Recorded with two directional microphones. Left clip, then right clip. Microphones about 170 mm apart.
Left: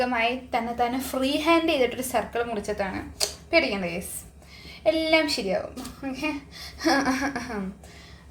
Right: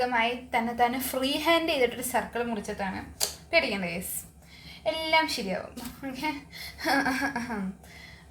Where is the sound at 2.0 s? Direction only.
25° left (ahead or behind).